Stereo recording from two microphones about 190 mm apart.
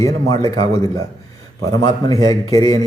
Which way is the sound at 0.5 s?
15° left (ahead or behind).